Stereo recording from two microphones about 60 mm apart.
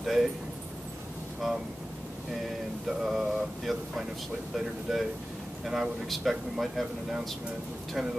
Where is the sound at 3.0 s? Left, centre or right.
Centre.